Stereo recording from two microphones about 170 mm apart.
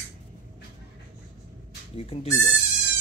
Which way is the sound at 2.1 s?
35° left (ahead or behind).